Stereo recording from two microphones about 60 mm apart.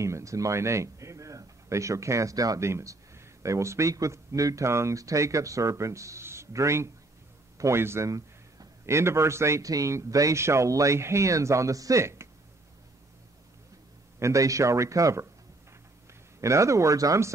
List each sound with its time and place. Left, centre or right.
0.0 s speech: right
2.6 s a man's voice: right
7.8 s a man's voice: right
9.6 s a man's voice: right
14.2 s a man's voice: right
16.3 s a man's voice: right